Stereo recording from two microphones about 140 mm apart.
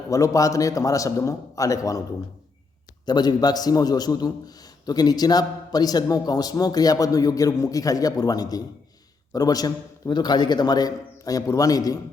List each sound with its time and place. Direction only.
0.1 s a man's voice: 25° left (ahead or behind)
3.1 s a man's voice: 30° left (ahead or behind)